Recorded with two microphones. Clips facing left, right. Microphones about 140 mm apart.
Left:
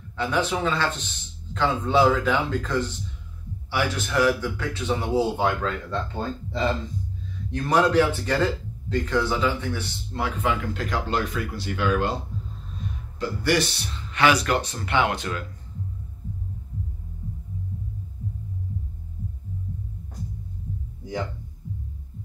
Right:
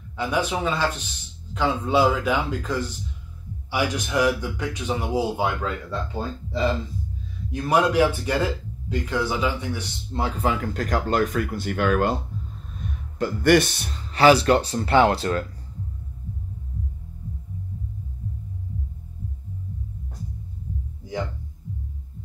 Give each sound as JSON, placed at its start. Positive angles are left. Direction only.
{"t": 0.2, "sound": "speech", "side_deg": -10}
{"t": 7.5, "sound": "speech", "side_deg": -10}
{"t": 10.1, "sound": "speech", "side_deg": -35}
{"t": 13.2, "sound": "speech", "side_deg": -55}